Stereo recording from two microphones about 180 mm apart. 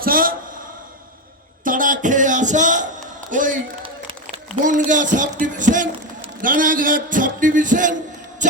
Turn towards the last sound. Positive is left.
turn(degrees=-45)  # may be behind; listen again after turning